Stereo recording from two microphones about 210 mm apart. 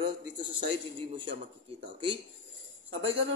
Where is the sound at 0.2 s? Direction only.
25° right (ahead or behind).